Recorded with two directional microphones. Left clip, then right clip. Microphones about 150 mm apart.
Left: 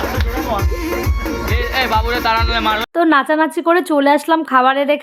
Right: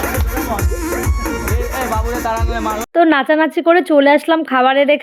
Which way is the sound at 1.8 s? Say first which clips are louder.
Left 4 dB; 50° right (ahead or behind).